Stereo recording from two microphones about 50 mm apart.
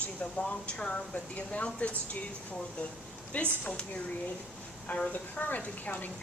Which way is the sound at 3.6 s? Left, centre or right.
Left.